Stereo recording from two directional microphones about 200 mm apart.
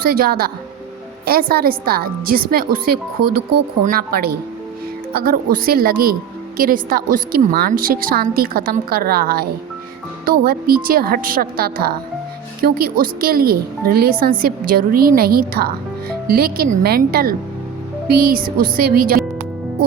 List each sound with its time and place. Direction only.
0.0 s a woman's voice: 50° right (ahead or behind)